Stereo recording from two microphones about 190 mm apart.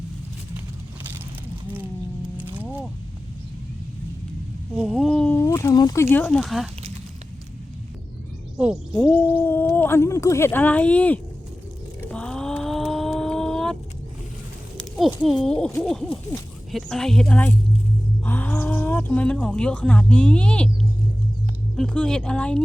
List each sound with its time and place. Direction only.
1.6 s a sound: 10° right (ahead or behind)
4.9 s speech: 5° left (ahead or behind)
8.5 s speech: 5° right (ahead or behind)
9.0 s speech: 10° left (ahead or behind)
12.1 s a sound: 5° left (ahead or behind)
14.9 s speech: centre (ahead or behind)
21.8 s speech: 5° left (ahead or behind)